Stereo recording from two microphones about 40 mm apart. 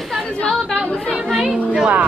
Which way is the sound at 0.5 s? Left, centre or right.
Centre.